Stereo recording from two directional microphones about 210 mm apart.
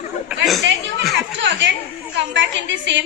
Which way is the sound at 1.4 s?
60° right (ahead or behind).